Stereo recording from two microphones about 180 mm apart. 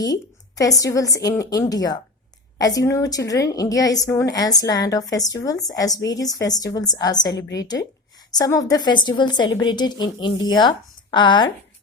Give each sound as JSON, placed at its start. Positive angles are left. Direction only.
{"t": 0.0, "sound": "a woman's voice", "side_deg": 20}